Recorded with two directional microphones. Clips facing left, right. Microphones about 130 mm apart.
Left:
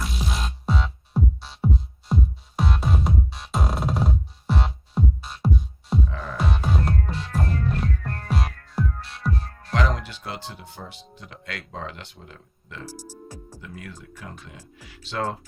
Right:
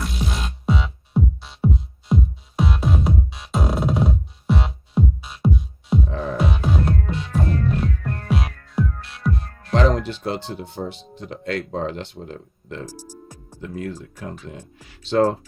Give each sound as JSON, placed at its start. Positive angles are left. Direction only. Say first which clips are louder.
{"t": 0.0, "sound": "music", "louder": "right 3 dB", "side_deg": 0}
{"t": 6.1, "sound": "music", "louder": "right 7 dB", "side_deg": -30}
{"t": 6.3, "sound": "music", "louder": "right 3 dB", "side_deg": 0}
{"t": 9.7, "sound": "music", "louder": "right 7 dB", "side_deg": -30}
{"t": 10.1, "sound": "speech", "louder": "right 9 dB", "side_deg": -30}